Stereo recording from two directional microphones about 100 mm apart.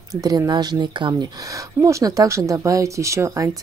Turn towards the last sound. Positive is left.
turn(degrees=-30)  # may be behind; listen again after turning